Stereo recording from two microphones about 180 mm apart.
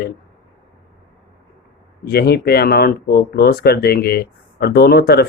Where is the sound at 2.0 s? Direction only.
60° left (ahead or behind).